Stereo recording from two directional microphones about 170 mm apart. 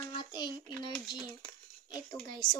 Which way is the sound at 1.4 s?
25° left (ahead or behind).